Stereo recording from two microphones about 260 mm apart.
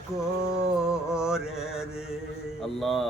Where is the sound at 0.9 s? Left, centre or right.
Centre.